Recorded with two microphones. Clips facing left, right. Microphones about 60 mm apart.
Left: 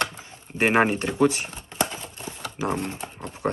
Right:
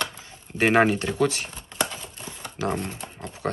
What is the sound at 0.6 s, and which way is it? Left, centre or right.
Speech, centre.